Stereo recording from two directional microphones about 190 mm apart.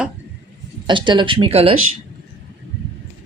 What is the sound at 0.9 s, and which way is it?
Speech, 25° right (ahead or behind).